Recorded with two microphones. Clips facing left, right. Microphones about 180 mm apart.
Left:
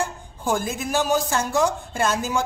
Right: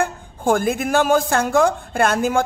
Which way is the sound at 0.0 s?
55° right (ahead or behind).